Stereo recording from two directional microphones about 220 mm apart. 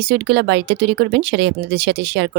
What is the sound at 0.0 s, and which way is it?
A woman's voice, 50° right (ahead or behind).